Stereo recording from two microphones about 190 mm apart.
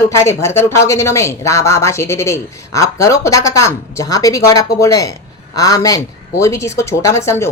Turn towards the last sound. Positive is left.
turn(degrees=15)  # may be behind; listen again after turning